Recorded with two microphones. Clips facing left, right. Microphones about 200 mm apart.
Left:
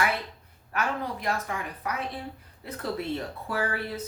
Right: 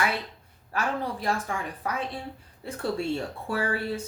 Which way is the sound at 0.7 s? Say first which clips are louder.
Right 1 dB; 30° right (ahead or behind).